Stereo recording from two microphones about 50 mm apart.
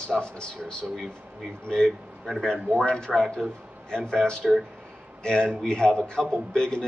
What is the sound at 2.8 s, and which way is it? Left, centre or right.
A man's voice, centre.